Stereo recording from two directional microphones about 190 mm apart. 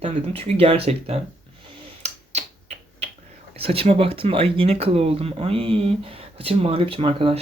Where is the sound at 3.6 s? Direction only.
30° right (ahead or behind).